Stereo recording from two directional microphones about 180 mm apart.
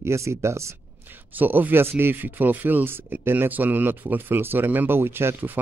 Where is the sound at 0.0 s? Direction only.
15° right (ahead or behind).